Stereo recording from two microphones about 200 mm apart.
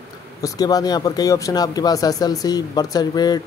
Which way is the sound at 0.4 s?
20° left (ahead or behind).